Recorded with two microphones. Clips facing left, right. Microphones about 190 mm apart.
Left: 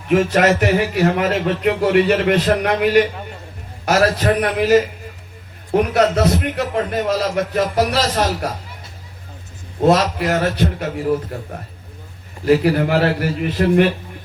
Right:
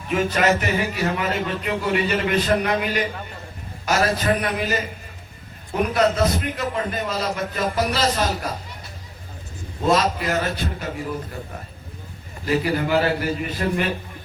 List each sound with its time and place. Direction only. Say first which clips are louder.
0.1 s a man's voice: left 5 dB; 65° left (ahead or behind)
9.8 s a man's voice: left 5 dB; 70° left (ahead or behind)
12.5 s a man's voice: left 6 dB; 60° left (ahead or behind)